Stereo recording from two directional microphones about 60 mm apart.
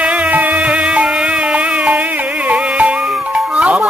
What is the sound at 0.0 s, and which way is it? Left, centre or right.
Music, right.